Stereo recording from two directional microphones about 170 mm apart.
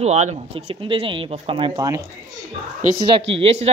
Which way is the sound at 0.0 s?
40° right (ahead or behind).